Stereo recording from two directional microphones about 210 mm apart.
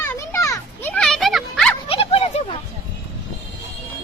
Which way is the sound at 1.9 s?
25° left (ahead or behind).